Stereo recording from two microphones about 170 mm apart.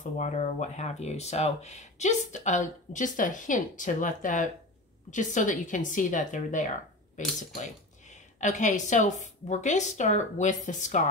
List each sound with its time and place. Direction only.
0.2 s speech: 45° left (ahead or behind)
8.1 s speech: 45° left (ahead or behind)